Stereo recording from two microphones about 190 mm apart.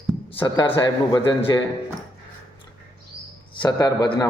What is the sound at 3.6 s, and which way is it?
Speech, 20° left (ahead or behind).